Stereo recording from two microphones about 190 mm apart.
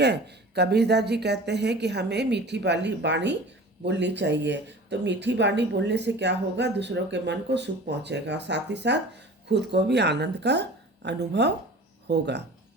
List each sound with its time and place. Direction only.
0.0 s speech: 60° right (ahead or behind)